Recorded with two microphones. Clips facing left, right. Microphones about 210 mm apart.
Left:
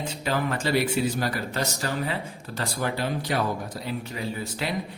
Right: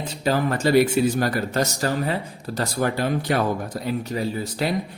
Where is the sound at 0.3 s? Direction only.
40° right (ahead or behind).